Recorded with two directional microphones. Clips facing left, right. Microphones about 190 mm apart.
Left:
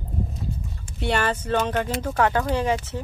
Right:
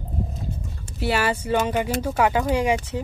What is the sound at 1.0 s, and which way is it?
Speech, 5° right (ahead or behind).